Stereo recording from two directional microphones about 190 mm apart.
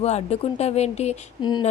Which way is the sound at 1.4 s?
20° left (ahead or behind).